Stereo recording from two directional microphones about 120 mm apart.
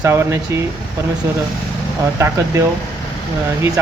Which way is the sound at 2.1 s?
25° right (ahead or behind).